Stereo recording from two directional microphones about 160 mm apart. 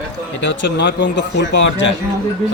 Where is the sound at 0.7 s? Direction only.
90° left.